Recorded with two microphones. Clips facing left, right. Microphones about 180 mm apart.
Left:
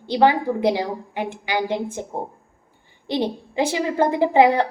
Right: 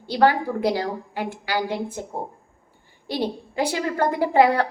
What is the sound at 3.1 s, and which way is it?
A woman's voice, 20° left (ahead or behind).